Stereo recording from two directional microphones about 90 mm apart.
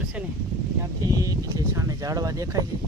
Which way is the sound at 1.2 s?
40° right (ahead or behind).